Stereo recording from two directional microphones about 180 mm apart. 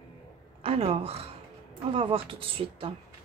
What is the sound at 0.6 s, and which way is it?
A woman's voice, 35° right (ahead or behind).